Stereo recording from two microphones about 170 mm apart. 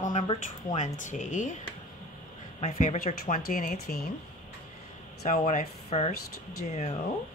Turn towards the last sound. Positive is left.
turn(degrees=40)  # may be behind; listen again after turning